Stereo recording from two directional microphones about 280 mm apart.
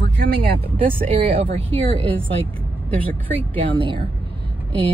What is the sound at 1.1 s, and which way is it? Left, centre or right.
Speech, centre.